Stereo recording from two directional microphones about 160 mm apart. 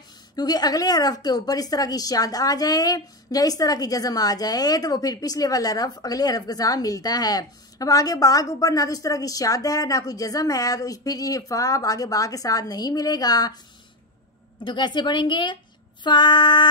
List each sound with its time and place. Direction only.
0.4 s a woman's voice: 25° left (ahead or behind)
14.6 s a woman's voice: 30° left (ahead or behind)